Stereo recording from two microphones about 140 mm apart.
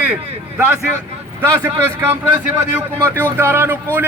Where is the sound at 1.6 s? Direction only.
20° right (ahead or behind).